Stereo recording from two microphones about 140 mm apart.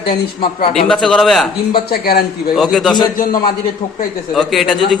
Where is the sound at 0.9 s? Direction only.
5° left (ahead or behind).